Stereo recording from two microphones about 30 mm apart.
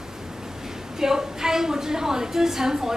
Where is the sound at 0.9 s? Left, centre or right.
Centre.